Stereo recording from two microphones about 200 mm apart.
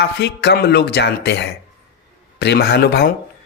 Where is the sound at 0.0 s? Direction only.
55° left (ahead or behind).